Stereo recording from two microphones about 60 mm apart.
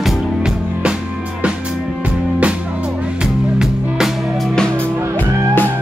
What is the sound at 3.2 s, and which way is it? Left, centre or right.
Music, centre.